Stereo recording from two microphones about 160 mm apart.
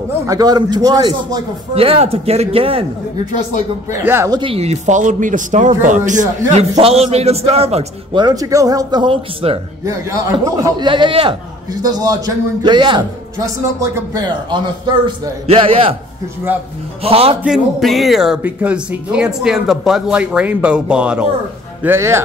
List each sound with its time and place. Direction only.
0.3 s a man's voice: 25° right (ahead or behind)
1.8 s a man's voice: 40° right (ahead or behind)
4.0 s a man's voice: 15° right (ahead or behind)
4.3 s a man's voice: 30° right (ahead or behind)
9.8 s a man's voice: 20° right (ahead or behind)
15.0 s a man's voice: 35° right (ahead or behind)
17.0 s a man's voice: 35° right (ahead or behind)
17.4 s a man's voice: centre (ahead or behind)